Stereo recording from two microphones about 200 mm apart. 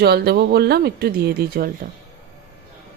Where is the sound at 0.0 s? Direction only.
50° right (ahead or behind).